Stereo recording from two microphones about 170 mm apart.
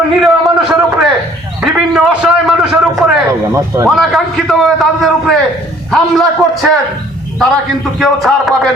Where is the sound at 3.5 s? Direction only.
20° right (ahead or behind).